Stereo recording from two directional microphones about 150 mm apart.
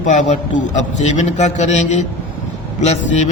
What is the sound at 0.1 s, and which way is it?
A man's voice, 55° left (ahead or behind).